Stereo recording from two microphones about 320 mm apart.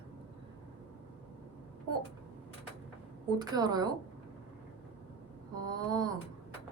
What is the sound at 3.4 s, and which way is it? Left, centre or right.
Speech, centre.